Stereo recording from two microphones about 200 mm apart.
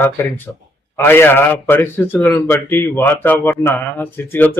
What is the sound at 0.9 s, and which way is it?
A man's voice, 10° left (ahead or behind).